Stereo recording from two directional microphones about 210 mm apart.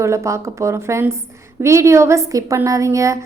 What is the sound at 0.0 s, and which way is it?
A woman's voice, 15° right (ahead or behind).